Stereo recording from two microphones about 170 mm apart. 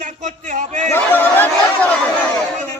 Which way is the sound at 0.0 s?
45° right (ahead or behind).